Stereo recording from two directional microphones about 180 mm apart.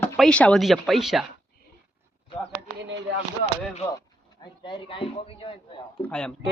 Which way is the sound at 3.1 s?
85° right.